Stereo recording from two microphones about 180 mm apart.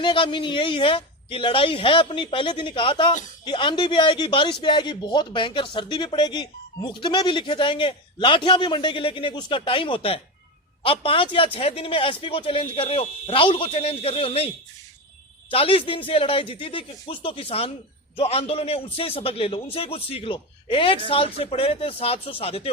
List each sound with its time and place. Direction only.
0.0 s a man's voice: 30° left (ahead or behind)